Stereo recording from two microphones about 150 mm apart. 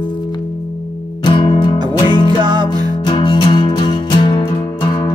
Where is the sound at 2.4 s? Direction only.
30° right (ahead or behind).